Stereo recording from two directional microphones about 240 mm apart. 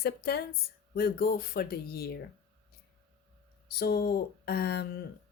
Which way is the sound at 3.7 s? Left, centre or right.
Left.